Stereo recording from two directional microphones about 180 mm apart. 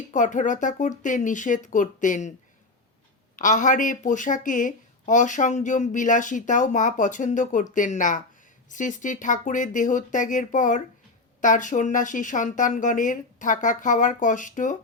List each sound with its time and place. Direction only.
0.1 s a woman's voice: 45° left (ahead or behind)
3.3 s a woman's voice: 45° left (ahead or behind)